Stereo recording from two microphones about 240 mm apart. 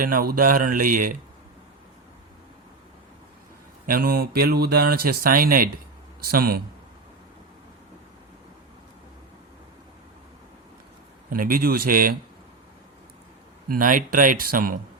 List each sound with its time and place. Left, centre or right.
0.0 s mantra: right
3.8 s mantra: right
11.3 s mantra: right
13.7 s mantra: right